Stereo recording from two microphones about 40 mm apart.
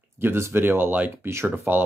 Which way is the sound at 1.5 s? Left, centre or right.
Right.